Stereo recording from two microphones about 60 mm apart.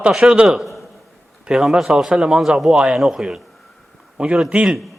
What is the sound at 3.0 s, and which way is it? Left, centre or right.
Speech, centre.